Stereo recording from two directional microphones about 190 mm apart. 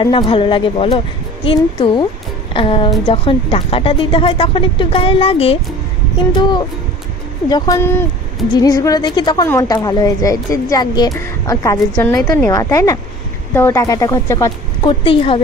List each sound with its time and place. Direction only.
0.0 s a woman's voice: 25° left (ahead or behind)
7.4 s a woman's voice: 20° left (ahead or behind)
11.9 s a woman's voice: 5° left (ahead or behind)
12.4 s speech: 15° left (ahead or behind)